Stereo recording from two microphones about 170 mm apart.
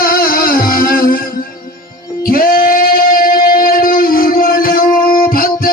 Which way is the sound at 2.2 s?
60° left (ahead or behind).